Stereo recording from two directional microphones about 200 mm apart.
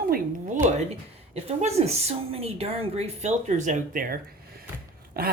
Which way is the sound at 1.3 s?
30° right (ahead or behind).